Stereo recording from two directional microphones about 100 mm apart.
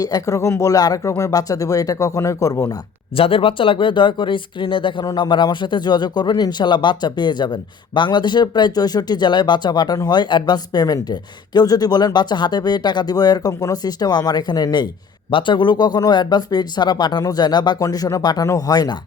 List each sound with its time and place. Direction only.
0.0 s speech: 35° left (ahead or behind)
3.2 s speech: 65° left (ahead or behind); by 14.8 s 40° left (ahead or behind)
15.3 s speech: 55° left (ahead or behind)